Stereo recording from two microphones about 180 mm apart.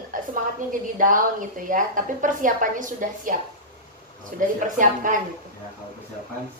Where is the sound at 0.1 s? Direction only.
50° right (ahead or behind).